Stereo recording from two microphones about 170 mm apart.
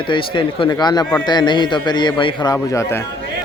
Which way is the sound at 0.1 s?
30° left (ahead or behind).